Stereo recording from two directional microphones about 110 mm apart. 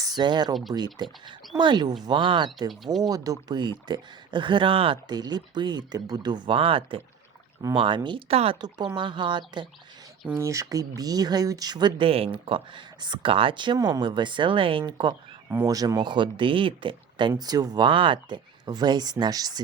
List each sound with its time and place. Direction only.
0.0 s speech: 40° right (ahead or behind)
5.1 s speech: 40° right (ahead or behind)
8.3 s speech: 65° right (ahead or behind)
9.0 s speech: 45° right (ahead or behind)
10.3 s speech: 30° right (ahead or behind); by 15.4 s 45° right (ahead or behind)
15.6 s speech: 35° right (ahead or behind)